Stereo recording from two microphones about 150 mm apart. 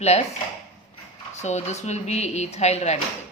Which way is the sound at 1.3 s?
50° left (ahead or behind).